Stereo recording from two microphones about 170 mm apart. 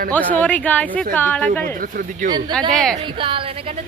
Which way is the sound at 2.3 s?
25° right (ahead or behind).